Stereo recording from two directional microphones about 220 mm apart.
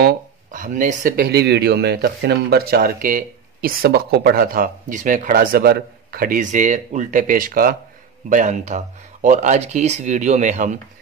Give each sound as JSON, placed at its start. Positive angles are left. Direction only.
{"t": 0.0, "sound": "speech", "side_deg": -35}